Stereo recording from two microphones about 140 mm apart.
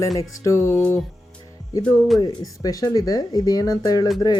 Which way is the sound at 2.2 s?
25° left (ahead or behind).